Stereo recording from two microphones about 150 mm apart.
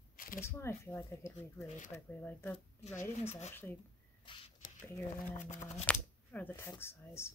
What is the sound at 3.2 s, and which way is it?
Speech, 45° left (ahead or behind).